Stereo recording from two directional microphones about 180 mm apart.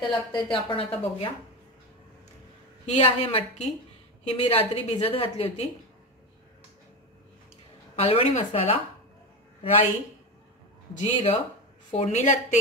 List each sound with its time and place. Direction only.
0.1 s a woman's voice: 25° left (ahead or behind)
2.9 s a woman's voice: 35° left (ahead or behind)
7.9 s a woman's voice: 35° left (ahead or behind)
11.0 s a woman's voice: 40° left (ahead or behind)